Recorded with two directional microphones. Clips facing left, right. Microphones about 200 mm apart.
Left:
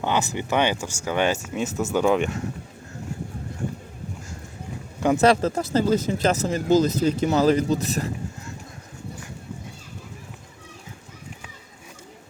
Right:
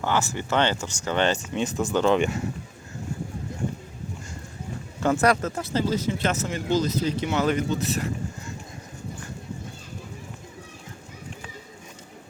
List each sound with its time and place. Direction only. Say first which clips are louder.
0.0 s speech: left 1 dB; 15° left (ahead or behind); by 2.4 s centre (ahead or behind)
4.9 s speech: left 2 dB; 15° left (ahead or behind)
5.2 s speech: left 4 dB; 30° left (ahead or behind)